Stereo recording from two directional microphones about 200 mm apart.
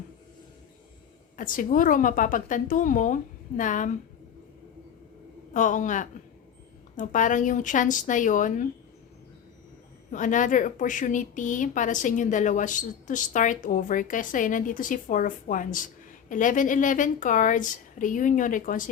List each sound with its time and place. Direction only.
1.4 s a woman's voice: 40° left (ahead or behind)
5.5 s a woman's voice: 40° left (ahead or behind)
10.1 s a woman's voice: 40° left (ahead or behind)